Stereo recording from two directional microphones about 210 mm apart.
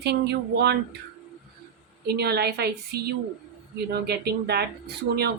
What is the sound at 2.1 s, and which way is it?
Speech, 50° right (ahead or behind).